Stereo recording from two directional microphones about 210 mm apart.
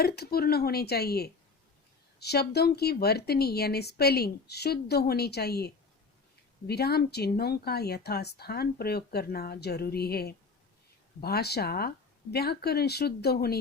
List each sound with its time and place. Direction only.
0.0 s speech: 45° left (ahead or behind)